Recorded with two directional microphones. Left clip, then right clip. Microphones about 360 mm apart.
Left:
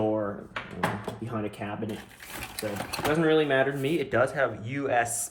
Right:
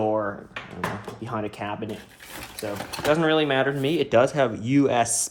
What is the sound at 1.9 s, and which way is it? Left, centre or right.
Speech, centre.